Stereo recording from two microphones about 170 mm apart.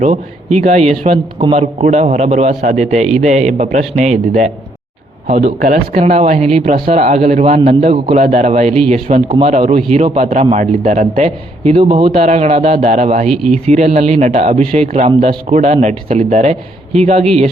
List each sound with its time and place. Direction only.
0.0 s a man's voice: 40° right (ahead or behind)
1.4 s a man's voice: 30° right (ahead or behind)
1.8 s a man's voice: 40° right (ahead or behind)
5.3 s a man's voice: 40° right (ahead or behind)